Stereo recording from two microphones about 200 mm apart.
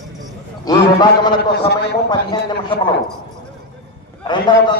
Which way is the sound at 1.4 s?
55° left (ahead or behind).